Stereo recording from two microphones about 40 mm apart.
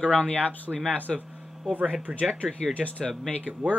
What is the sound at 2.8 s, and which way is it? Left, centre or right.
Speech, left.